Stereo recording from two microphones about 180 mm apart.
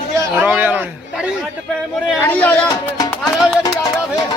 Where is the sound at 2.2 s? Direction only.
10° left (ahead or behind).